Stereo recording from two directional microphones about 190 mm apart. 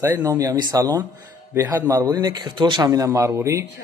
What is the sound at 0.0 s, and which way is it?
A man's voice, 15° right (ahead or behind).